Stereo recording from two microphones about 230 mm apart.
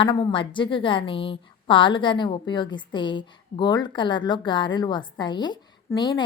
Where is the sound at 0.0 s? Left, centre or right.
Left.